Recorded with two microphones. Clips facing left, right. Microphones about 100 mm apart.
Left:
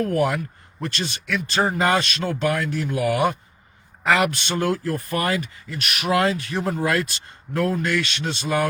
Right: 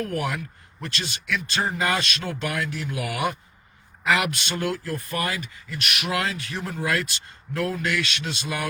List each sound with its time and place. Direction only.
0.0 s speech: 35° left (ahead or behind)